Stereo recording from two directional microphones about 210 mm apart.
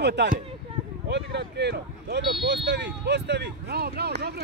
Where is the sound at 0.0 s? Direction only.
55° right (ahead or behind).